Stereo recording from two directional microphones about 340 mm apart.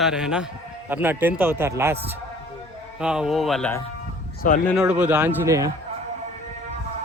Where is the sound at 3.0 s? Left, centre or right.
Centre.